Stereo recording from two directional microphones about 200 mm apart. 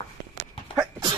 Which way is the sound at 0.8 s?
20° right (ahead or behind).